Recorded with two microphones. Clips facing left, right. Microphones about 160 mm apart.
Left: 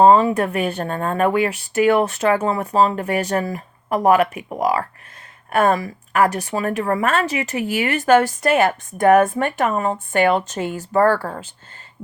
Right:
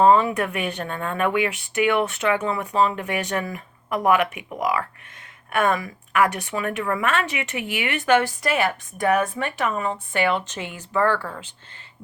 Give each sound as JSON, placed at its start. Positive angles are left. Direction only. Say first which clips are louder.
{"t": 0.0, "sound": "a woman's voice", "louder": "left 4 dB", "side_deg": 35}